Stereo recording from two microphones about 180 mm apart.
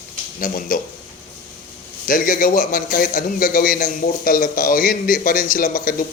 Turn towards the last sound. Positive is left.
turn(degrees=50)  # may be behind; listen again after turning